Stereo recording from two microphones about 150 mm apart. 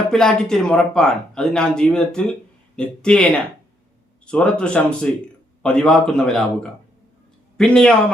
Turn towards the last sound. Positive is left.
turn(degrees=5)  # may be behind; listen again after turning